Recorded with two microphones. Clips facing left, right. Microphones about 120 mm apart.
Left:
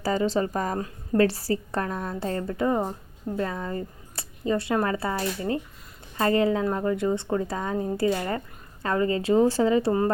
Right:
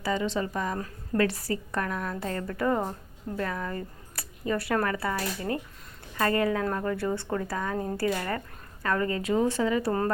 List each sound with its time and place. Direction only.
0.0 s speech: 40° left (ahead or behind)
0.8 s speech: 30° left (ahead or behind)